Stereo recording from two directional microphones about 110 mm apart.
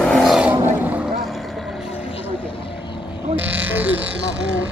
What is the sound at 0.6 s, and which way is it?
Vehicle, 15° right (ahead or behind).